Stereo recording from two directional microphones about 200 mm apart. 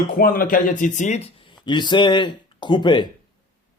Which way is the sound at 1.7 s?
20° left (ahead or behind).